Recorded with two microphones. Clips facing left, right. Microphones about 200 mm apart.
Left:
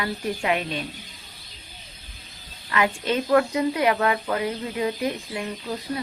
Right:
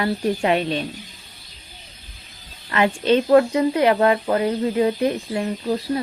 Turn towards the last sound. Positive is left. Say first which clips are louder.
# right 6 dB
turn(degrees=-35)  # may be behind; listen again after turning